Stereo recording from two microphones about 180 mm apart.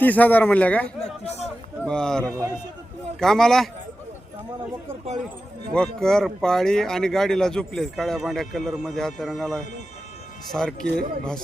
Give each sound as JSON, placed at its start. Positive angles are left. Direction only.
{"t": 0.0, "sound": "a man's voice", "side_deg": 10}
{"t": 1.2, "sound": "speech", "side_deg": 40}
{"t": 1.8, "sound": "speech", "side_deg": 5}
{"t": 5.7, "sound": "speech", "side_deg": 5}